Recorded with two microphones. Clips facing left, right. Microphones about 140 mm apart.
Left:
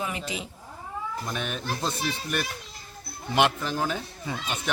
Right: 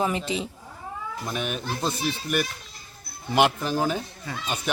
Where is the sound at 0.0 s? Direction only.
30° right (ahead or behind).